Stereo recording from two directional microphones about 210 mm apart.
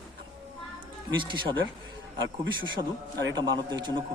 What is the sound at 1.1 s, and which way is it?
Speech, 20° right (ahead or behind).